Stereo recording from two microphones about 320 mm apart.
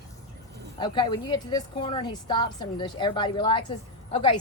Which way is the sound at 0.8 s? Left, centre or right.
Centre.